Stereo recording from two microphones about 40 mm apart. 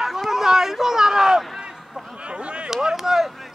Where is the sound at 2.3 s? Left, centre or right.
Right.